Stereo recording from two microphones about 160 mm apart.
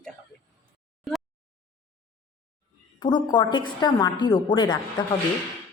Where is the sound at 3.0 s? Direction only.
25° left (ahead or behind).